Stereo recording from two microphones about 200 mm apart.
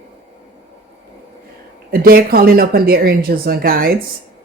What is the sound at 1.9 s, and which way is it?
Speech, 50° right (ahead or behind).